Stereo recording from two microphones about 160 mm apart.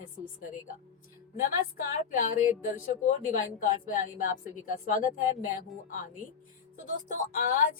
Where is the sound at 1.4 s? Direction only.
60° left (ahead or behind).